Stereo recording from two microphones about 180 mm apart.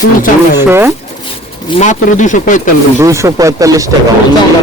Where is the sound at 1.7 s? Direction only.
40° left (ahead or behind).